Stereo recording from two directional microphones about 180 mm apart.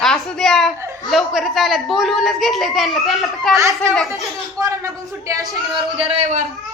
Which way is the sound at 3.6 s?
15° right (ahead or behind).